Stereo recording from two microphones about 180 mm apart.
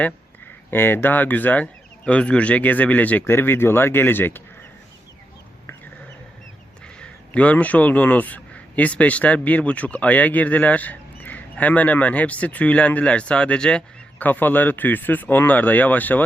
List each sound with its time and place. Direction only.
0.7 s a man's voice: 10° left (ahead or behind)
6.8 s a man's voice: 5° left (ahead or behind)